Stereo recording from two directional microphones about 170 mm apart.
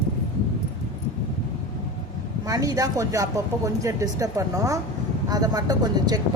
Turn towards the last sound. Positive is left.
turn(degrees=-25)  # may be behind; listen again after turning